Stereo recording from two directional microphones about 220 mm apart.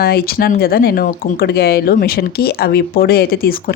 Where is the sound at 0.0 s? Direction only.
45° left (ahead or behind).